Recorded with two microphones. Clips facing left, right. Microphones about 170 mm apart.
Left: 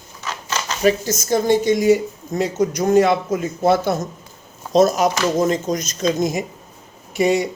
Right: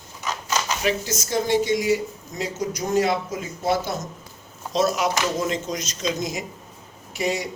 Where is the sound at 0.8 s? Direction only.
45° left (ahead or behind).